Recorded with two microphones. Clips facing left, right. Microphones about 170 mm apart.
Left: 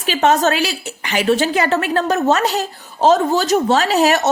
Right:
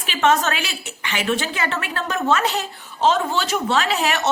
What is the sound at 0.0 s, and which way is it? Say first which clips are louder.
A woman's voice: left 4 dB; 40° left (ahead or behind).